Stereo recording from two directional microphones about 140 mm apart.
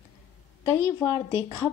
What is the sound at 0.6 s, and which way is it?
Speech, 20° left (ahead or behind).